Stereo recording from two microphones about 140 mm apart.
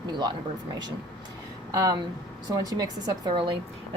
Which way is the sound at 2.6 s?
25° right (ahead or behind).